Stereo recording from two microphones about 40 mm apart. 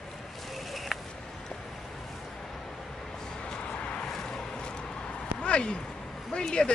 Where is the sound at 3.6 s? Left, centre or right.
Left.